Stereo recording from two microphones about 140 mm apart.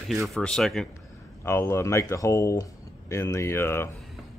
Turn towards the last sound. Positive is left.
turn(degrees=15)  # may be behind; listen again after turning